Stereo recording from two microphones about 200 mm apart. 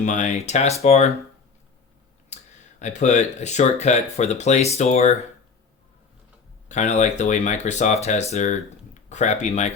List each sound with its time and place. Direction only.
0.0 s speech: 40° left (ahead or behind)
2.3 s speech: 35° left (ahead or behind)
6.7 s speech: 35° left (ahead or behind)